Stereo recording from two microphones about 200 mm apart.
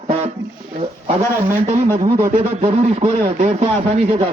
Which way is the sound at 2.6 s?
30° right (ahead or behind).